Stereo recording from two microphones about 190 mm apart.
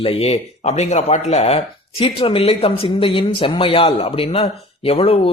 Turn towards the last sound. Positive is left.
turn(degrees=30)  # may be behind; listen again after turning